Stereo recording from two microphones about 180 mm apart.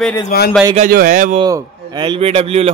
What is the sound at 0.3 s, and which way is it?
Speech, 55° left (ahead or behind).